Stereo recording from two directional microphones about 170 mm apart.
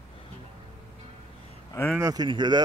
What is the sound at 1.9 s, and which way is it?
Speech, 20° right (ahead or behind).